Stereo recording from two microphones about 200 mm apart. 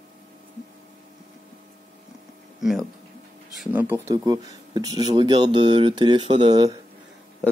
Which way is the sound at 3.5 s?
10° right (ahead or behind).